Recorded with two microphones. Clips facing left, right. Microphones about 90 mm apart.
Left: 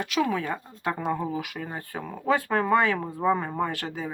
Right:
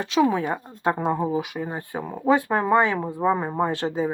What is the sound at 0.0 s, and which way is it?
Speech, 25° right (ahead or behind).